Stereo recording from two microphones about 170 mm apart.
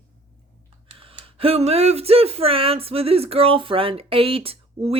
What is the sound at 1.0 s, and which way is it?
Speech, 35° right (ahead or behind).